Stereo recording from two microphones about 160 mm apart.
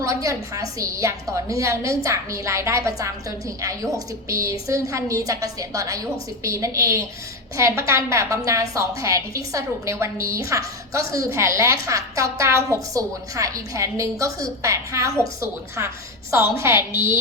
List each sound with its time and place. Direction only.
0.0 s a woman's voice: 20° right (ahead or behind)